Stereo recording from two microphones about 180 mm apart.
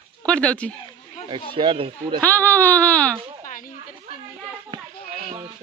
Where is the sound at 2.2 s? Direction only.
10° left (ahead or behind).